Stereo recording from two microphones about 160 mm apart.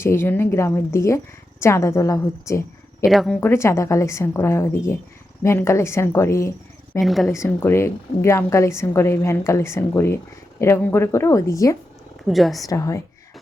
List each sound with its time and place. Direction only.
0.0 s a woman's voice: 15° left (ahead or behind)
3.0 s speech: centre (ahead or behind)
3.4 s a woman's voice: 15° left (ahead or behind)
7.0 s speech: centre (ahead or behind)
7.3 s a woman's voice: 15° left (ahead or behind)
12.3 s speech: centre (ahead or behind)
12.6 s a woman's voice: 20° left (ahead or behind)